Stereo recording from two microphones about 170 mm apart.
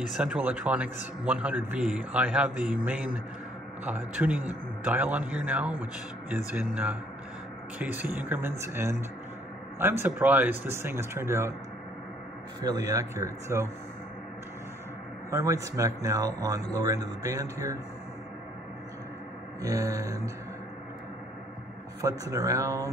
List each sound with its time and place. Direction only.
0.2 s a man's voice: 5° right (ahead or behind)
12.7 s a man's voice: 15° right (ahead or behind)
15.3 s a man's voice: 20° right (ahead or behind)
19.6 s speech: 20° right (ahead or behind)
22.0 s speech: 20° right (ahead or behind)